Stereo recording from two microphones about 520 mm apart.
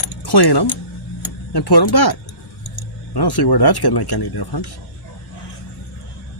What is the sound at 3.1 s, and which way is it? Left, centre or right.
Speech, left.